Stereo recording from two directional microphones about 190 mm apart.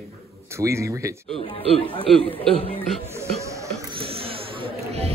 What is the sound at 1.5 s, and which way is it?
Speech, 30° left (ahead or behind).